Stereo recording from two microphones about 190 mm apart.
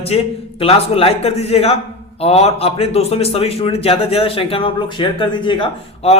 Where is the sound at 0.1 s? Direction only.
30° left (ahead or behind).